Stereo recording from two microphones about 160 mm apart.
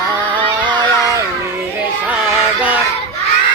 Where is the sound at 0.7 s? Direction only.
25° right (ahead or behind).